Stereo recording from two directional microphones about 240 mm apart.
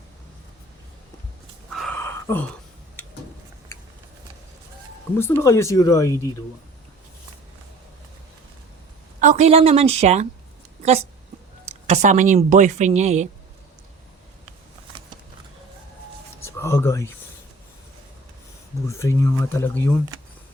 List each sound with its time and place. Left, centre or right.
1.7 s a sound: centre
5.1 s speech: centre
9.2 s a woman's voice: right
11.9 s a woman's voice: right
16.4 s a sound: centre
18.9 s speech: centre